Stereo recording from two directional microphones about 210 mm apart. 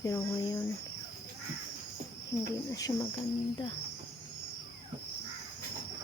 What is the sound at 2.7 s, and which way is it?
Speech, 15° left (ahead or behind).